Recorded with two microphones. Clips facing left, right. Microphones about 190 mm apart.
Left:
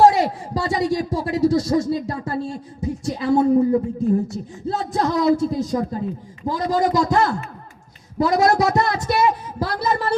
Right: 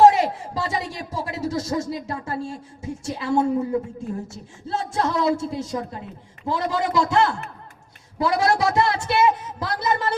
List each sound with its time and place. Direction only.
0.0 s a man's voice: 35° left (ahead or behind)